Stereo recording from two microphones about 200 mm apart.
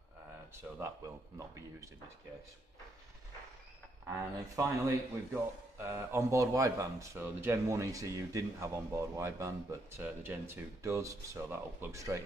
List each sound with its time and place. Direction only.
0.7 s a man's voice: 15° right (ahead or behind)
4.1 s a man's voice: 15° right (ahead or behind)